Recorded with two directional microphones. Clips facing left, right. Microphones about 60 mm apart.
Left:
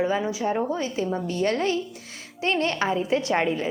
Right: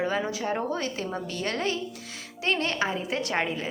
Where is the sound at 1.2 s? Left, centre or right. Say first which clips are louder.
Left 5 dB; left.